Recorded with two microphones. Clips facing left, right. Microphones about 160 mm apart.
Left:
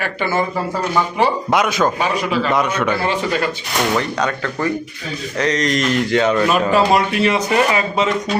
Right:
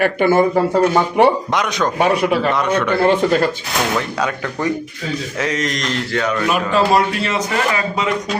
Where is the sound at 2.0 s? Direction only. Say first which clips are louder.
Right 4 dB; 60° right (ahead or behind).